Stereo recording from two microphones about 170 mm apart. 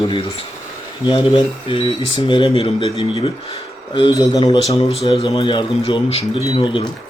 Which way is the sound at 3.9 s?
25° left (ahead or behind).